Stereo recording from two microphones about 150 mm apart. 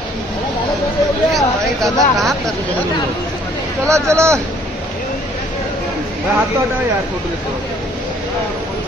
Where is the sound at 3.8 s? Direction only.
20° right (ahead or behind).